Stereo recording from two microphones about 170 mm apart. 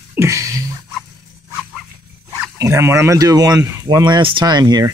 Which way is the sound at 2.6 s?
15° right (ahead or behind).